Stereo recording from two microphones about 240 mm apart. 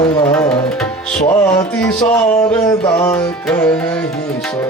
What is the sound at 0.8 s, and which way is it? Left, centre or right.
Tabla, centre.